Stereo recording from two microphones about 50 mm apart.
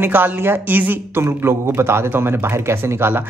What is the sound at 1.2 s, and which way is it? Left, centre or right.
A man's voice, right.